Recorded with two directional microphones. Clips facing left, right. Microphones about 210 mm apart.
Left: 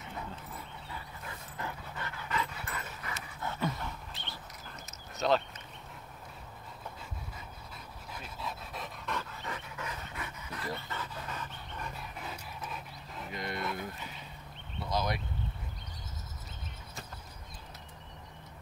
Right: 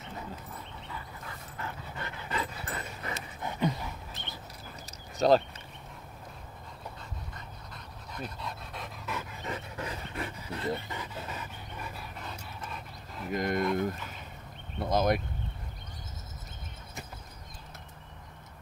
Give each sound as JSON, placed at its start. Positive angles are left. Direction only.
{"t": 2.0, "sound": "dog", "side_deg": -25}
{"t": 3.3, "sound": "dog", "side_deg": -15}
{"t": 4.8, "sound": "a sound", "side_deg": -40}
{"t": 7.3, "sound": "dog", "side_deg": 5}
{"t": 9.2, "sound": "dog", "side_deg": -20}
{"t": 9.8, "sound": "dog", "side_deg": -30}
{"t": 11.0, "sound": "dog", "side_deg": -10}
{"t": 12.2, "sound": "dog", "side_deg": 5}
{"t": 13.3, "sound": "speech", "side_deg": -45}
{"t": 14.8, "sound": "a sound", "side_deg": -50}